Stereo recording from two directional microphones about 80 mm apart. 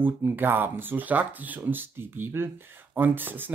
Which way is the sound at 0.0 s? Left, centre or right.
Right.